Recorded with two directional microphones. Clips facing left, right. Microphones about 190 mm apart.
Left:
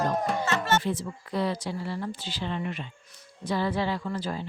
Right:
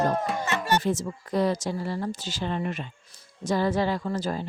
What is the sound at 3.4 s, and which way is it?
Speech, 45° right (ahead or behind).